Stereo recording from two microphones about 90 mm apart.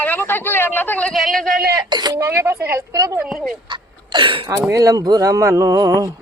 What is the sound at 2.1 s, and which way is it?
Speech, 30° right (ahead or behind).